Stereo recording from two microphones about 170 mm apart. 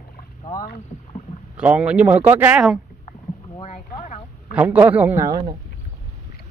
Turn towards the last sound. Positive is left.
turn(degrees=-25)  # may be behind; listen again after turning